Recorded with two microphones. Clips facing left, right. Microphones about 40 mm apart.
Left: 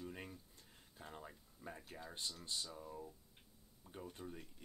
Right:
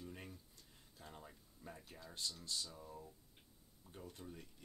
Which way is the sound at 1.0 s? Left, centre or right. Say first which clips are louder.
Left 3 dB; centre.